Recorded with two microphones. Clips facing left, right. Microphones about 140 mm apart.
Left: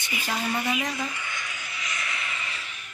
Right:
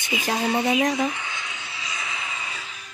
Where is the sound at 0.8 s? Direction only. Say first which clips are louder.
Right 8 dB; 90° right.